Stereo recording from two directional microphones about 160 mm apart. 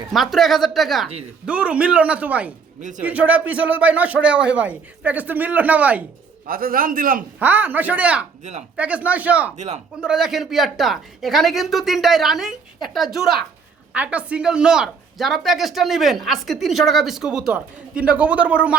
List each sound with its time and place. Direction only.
0.1 s speech: centre (ahead or behind)
6.5 s a man's voice: 65° right (ahead or behind)
7.3 s speech: 10° right (ahead or behind)
9.6 s a man's voice: 45° right (ahead or behind)
10.0 s speech: 5° right (ahead or behind)